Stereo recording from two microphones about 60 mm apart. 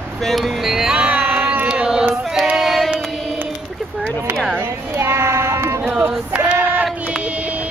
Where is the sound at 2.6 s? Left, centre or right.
Centre.